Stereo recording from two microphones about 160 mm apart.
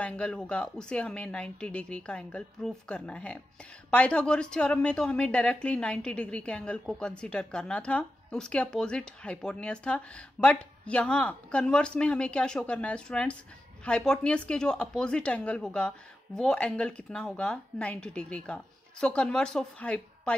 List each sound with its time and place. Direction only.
0.0 s a woman's voice: 5° left (ahead or behind)